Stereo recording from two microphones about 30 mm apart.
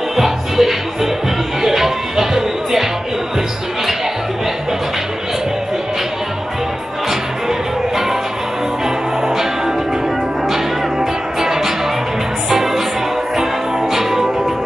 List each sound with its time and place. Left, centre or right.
0.1 s music: centre
10.5 s music: centre
13.9 s music: centre